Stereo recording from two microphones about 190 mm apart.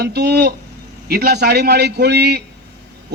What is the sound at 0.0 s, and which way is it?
A man's voice, 60° right (ahead or behind).